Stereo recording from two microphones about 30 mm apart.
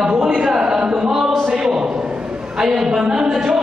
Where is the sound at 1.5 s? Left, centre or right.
Centre.